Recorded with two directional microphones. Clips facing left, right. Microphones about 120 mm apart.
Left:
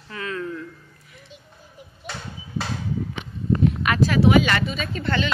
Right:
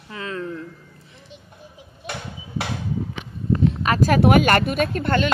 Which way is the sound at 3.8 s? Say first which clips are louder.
Right 1 dB; 35° right (ahead or behind).